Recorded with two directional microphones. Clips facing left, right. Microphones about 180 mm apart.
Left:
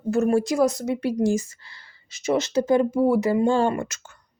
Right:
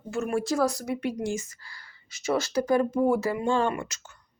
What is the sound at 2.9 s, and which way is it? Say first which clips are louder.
Speech: left 3 dB; 5° left (ahead or behind).